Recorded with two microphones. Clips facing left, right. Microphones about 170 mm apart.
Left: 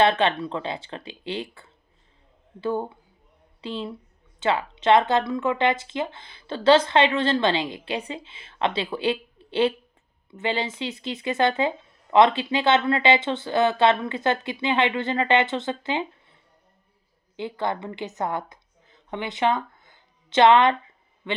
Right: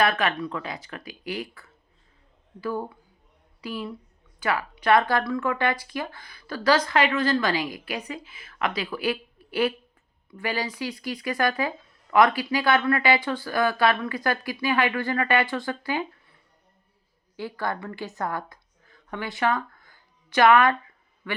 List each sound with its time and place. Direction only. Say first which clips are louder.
0.0 s speech: left 3 dB; 25° left (ahead or behind)
17.3 s a woman's voice: left 2 dB; 20° left (ahead or behind)